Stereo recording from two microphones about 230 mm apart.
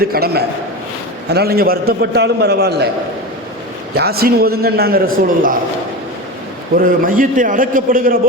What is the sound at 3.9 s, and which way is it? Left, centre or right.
A man's voice, right.